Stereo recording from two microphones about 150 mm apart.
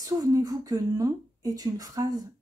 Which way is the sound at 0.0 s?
25° right (ahead or behind).